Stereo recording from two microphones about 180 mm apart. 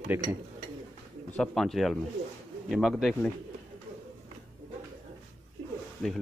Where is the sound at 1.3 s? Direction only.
5° left (ahead or behind).